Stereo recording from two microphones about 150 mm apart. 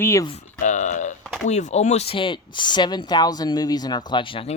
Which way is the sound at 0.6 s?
55° left (ahead or behind).